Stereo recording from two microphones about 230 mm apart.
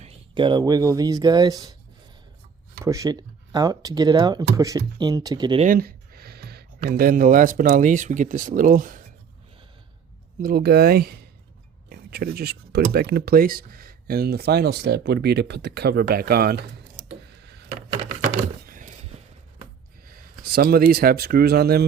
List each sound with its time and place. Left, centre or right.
0.0 s speech: right
2.8 s speech: centre
5.6 s speech: right
10.4 s speech: right
18.2 s a sound: right
20.4 s speech: right